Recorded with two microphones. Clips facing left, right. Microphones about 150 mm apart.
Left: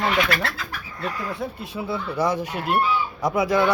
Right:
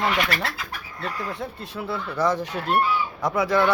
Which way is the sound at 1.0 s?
10° left (ahead or behind).